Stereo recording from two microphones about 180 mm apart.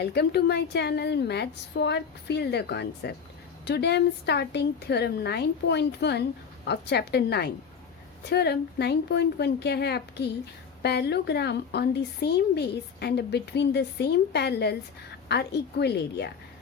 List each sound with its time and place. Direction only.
0.0 s a woman's voice: 65° left (ahead or behind)